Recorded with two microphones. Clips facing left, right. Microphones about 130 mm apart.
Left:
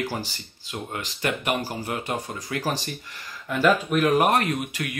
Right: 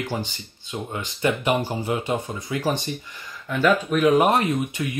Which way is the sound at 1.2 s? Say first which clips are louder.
Right 4 dB; 25° right (ahead or behind).